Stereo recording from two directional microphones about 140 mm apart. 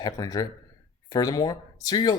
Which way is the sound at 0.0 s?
25° left (ahead or behind).